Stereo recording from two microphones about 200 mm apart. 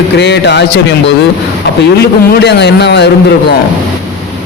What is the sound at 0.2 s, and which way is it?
Speech, 60° left (ahead or behind).